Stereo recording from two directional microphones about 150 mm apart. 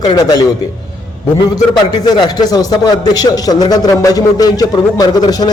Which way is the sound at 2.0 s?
30° left (ahead or behind).